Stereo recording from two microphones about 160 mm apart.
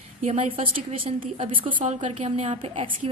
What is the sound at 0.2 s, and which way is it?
Speech, 50° right (ahead or behind).